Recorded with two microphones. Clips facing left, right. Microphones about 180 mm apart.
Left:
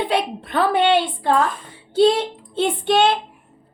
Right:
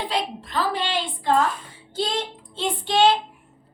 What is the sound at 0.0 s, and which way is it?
A woman's voice, 60° left (ahead or behind).